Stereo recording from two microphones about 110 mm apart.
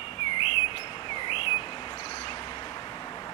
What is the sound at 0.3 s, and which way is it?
Chirp, 50° left (ahead or behind).